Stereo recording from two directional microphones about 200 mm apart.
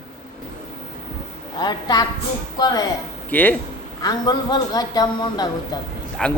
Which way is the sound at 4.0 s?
20° left (ahead or behind).